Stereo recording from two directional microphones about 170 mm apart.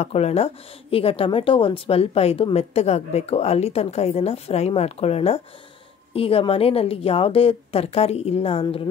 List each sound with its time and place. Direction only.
0.0 s a woman's voice: 40° left (ahead or behind)